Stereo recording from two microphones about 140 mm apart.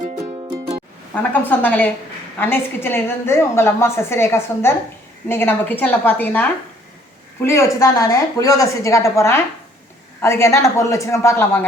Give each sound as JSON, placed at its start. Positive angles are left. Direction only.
{"t": 1.1, "sound": "a woman's voice", "side_deg": 15}